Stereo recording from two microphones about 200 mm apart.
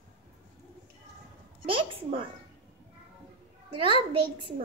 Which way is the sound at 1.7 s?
25° right (ahead or behind).